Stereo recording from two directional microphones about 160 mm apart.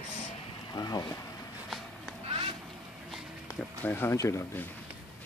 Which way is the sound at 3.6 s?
10° left (ahead or behind).